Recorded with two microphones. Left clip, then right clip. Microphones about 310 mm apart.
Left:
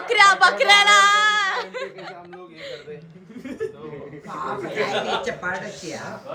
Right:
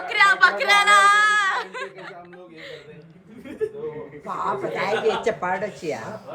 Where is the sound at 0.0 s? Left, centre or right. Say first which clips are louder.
Left 2 dB; centre.